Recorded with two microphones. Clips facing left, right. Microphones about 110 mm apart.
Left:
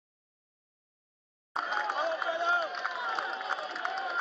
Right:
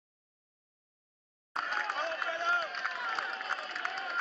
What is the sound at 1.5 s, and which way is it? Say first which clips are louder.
Run: left 3 dB; centre (ahead or behind).